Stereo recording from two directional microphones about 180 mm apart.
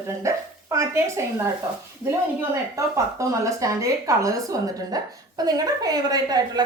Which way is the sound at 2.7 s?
20° right (ahead or behind).